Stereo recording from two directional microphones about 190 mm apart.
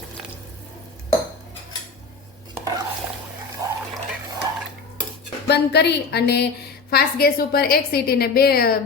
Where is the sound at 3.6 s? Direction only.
15° right (ahead or behind).